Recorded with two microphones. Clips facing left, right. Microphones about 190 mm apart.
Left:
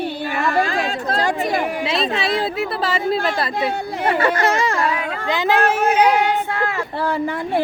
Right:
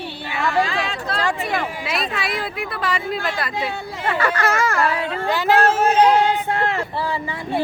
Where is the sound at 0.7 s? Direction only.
40° left (ahead or behind).